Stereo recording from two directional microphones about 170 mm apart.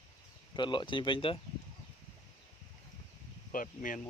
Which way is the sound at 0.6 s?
30° left (ahead or behind).